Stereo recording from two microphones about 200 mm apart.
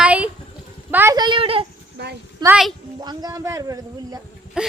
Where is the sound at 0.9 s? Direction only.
15° right (ahead or behind).